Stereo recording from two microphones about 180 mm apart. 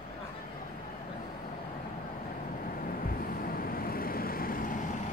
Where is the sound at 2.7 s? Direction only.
50° left (ahead or behind).